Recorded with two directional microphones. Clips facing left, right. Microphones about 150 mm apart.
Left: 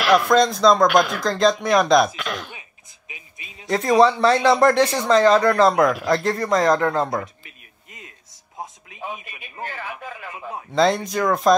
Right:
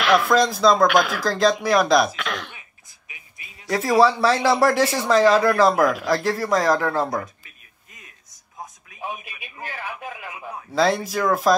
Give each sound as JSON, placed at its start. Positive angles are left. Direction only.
{"t": 0.0, "sound": "speech", "side_deg": 0}
{"t": 3.1, "sound": "music", "side_deg": 20}
{"t": 4.0, "sound": "speech", "side_deg": -5}
{"t": 7.2, "sound": "a sound", "side_deg": 20}
{"t": 9.7, "sound": "speech", "side_deg": -15}
{"t": 10.7, "sound": "speech", "side_deg": -5}